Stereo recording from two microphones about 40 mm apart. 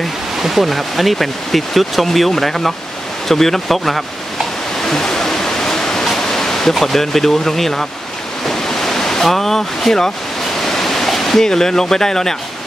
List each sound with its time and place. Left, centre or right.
0.4 s speech: centre
4.8 s waterfall: centre
6.0 s pink noise: centre
6.7 s speech: centre
8.5 s waterfall: centre